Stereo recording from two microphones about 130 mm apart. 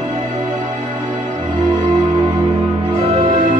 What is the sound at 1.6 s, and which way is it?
Music, 35° right (ahead or behind).